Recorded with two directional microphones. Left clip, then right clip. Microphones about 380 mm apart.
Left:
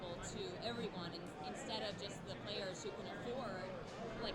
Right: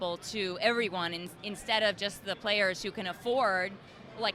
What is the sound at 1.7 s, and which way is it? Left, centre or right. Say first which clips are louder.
Speech: right 19 dB; right.